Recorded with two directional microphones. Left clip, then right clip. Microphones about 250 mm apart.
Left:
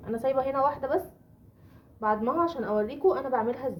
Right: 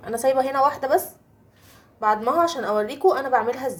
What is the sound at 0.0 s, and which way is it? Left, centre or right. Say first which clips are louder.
A woman's voice: right 6 dB; right.